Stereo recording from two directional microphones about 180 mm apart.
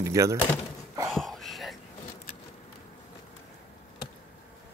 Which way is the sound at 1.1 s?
Centre (ahead or behind).